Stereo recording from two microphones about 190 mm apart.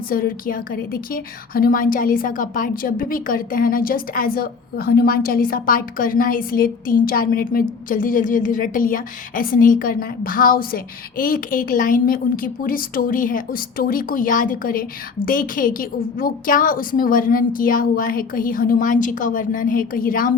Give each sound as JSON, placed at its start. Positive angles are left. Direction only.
{"t": 0.1, "sound": "a woman's voice", "side_deg": 50}